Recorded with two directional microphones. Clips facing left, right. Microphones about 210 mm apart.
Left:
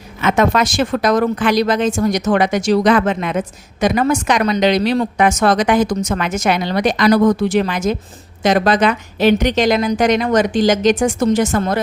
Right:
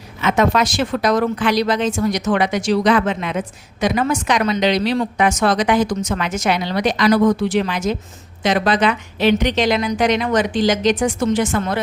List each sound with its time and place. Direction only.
0.2 s a woman's voice: 50° left (ahead or behind)